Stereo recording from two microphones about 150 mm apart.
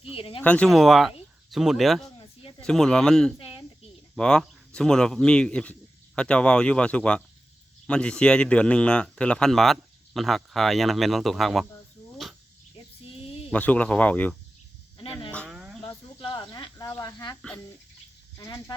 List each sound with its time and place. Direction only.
0.1 s speech: 40° left (ahead or behind)
0.4 s a man's voice: 5° left (ahead or behind)
3.3 s speech: 35° left (ahead or behind)
4.1 s a man's voice: 5° left (ahead or behind)
13.2 s a sound: 40° left (ahead or behind)
13.5 s speech: 10° left (ahead or behind)
14.9 s a sound: 35° left (ahead or behind)
15.4 s a sound: 5° right (ahead or behind)
16.2 s cricket: 30° left (ahead or behind)
18.3 s speech: 25° left (ahead or behind)